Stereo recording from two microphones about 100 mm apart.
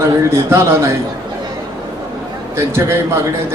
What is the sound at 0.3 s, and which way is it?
Speech, 25° right (ahead or behind).